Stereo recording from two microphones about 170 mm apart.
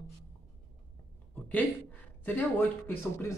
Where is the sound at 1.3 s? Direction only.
10° left (ahead or behind).